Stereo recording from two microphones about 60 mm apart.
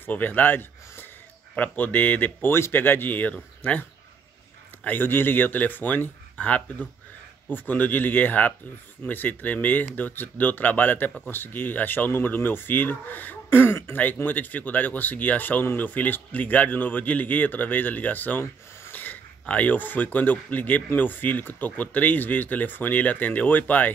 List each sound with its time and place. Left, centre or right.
0.0 s speech: left
2.5 s speech: left
4.8 s speech: left
13.9 s speech: left